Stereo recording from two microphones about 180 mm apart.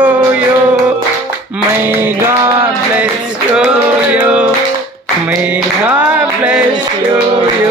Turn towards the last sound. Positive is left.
turn(degrees=-10)  # may be behind; listen again after turning